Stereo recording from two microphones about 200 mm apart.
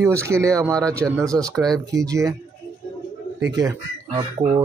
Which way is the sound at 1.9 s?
15° right (ahead or behind).